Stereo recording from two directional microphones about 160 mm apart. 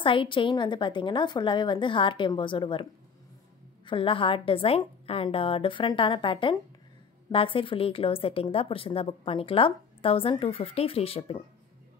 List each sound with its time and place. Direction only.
0.0 s a woman's voice: 30° left (ahead or behind)